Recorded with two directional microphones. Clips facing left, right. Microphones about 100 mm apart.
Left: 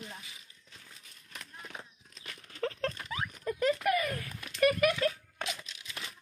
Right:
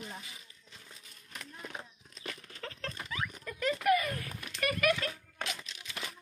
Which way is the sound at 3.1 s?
30° left (ahead or behind).